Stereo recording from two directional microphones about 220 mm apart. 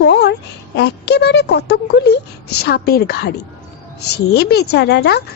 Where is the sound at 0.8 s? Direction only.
50° left (ahead or behind).